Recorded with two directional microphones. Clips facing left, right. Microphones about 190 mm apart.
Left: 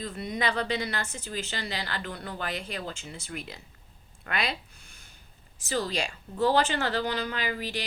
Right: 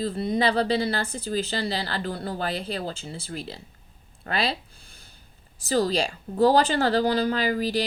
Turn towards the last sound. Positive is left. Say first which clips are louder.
# right 8 dB
turn(degrees=-35)  # may be behind; listen again after turning